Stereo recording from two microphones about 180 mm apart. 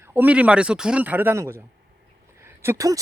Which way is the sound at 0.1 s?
10° right (ahead or behind).